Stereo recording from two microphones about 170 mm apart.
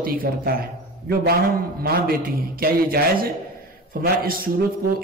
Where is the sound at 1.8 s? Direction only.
60° right (ahead or behind).